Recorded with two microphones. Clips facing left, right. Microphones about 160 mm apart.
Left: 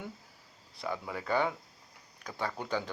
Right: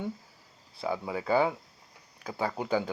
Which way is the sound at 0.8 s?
30° right (ahead or behind).